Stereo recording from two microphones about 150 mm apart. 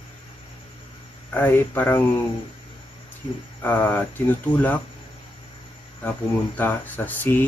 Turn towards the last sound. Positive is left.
turn(degrees=10)  # may be behind; listen again after turning